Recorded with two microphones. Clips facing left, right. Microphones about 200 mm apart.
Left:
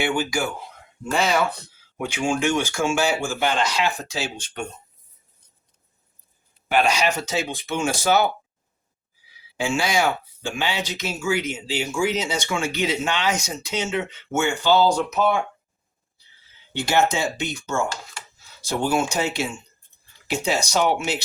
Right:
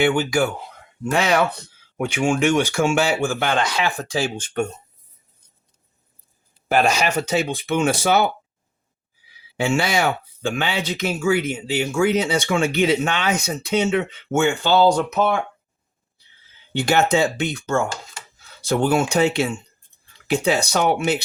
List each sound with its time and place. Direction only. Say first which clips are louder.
1.1 s speech: right 2 dB; 60° right (ahead or behind)
6.7 s speech: right 2 dB; 45° right (ahead or behind)
9.6 s speech: right 2 dB; 60° right (ahead or behind)
16.7 s speech: right 3 dB; 60° right (ahead or behind)